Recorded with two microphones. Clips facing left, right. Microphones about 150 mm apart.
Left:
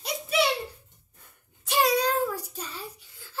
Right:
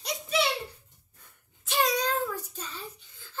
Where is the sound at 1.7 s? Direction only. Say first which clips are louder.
Left 3 dB; 10° left (ahead or behind).